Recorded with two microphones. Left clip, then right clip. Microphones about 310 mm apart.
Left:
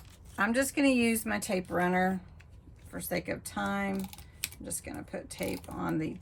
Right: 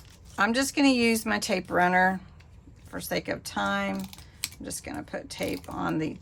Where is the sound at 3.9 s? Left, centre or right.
Centre.